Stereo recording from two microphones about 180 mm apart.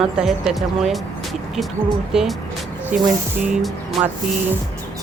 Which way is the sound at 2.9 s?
10° right (ahead or behind).